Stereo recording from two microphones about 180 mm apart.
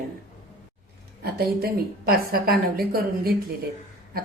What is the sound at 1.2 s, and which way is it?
A woman's voice, 60° right (ahead or behind).